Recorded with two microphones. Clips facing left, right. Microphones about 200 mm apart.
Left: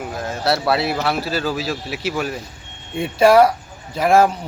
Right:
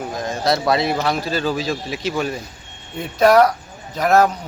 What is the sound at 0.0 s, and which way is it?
A man's voice, 5° left (ahead or behind).